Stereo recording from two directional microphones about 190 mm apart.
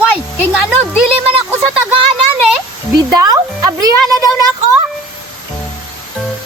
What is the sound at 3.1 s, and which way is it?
Speech, 20° right (ahead or behind).